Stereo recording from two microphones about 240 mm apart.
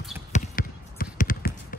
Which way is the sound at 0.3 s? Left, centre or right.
Left.